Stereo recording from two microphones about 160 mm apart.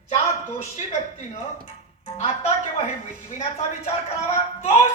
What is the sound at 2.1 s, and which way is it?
Speech, 40° left (ahead or behind).